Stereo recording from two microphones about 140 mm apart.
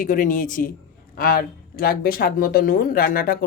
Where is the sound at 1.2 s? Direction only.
90° left.